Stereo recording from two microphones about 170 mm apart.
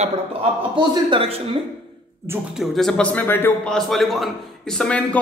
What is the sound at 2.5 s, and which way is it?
A man's voice, centre (ahead or behind).